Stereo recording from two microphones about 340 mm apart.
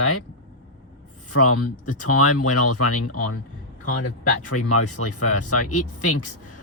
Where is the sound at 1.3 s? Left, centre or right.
Left.